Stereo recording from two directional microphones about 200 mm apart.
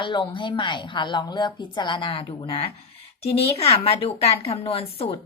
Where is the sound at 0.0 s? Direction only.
25° left (ahead or behind).